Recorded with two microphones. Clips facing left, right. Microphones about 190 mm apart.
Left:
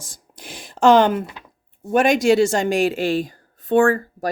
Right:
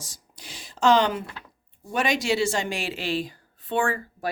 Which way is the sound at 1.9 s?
50° left (ahead or behind).